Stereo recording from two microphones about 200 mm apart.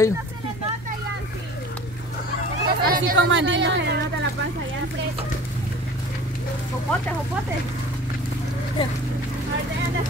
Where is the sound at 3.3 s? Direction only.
70° right (ahead or behind).